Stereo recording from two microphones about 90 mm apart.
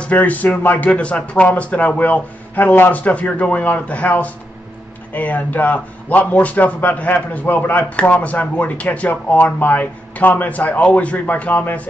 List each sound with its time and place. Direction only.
0.0 s a man's voice: 15° left (ahead or behind)